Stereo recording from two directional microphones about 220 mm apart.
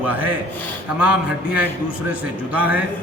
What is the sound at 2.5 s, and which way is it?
Speech, 5° right (ahead or behind).